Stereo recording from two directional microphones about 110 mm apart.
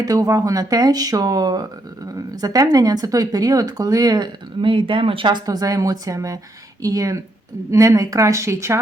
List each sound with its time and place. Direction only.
0.0 s speech: 30° right (ahead or behind)